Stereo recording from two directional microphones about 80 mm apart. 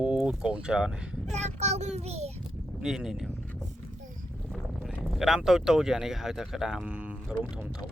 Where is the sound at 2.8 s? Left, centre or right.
Centre.